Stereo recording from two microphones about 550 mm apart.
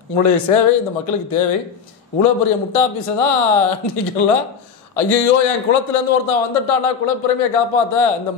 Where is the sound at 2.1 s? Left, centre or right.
Left.